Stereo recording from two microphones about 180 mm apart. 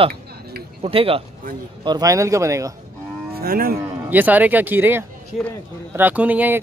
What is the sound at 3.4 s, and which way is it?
Speech, 55° right (ahead or behind).